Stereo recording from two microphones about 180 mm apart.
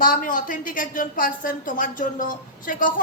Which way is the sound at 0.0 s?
50° left (ahead or behind).